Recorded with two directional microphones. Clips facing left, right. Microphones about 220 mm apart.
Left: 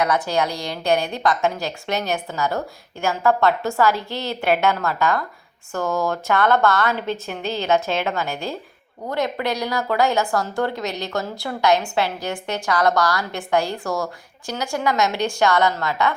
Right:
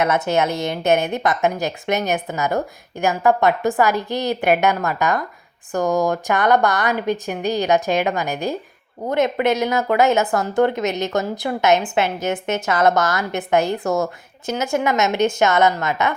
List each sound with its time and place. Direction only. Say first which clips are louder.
0.0 s a woman's voice: right 2 dB; 25° right (ahead or behind)